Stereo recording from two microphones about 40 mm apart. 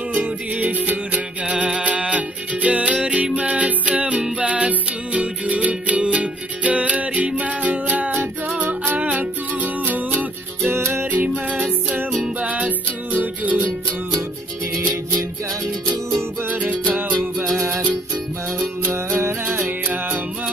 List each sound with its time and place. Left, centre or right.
0.2 s music: right
1.5 s music: right
10.7 s music: right
11.1 s music: right
12.4 s music: right
16.4 s music: right
19.0 s music: right